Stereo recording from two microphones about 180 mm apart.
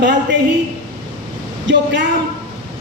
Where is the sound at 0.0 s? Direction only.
75° right (ahead or behind).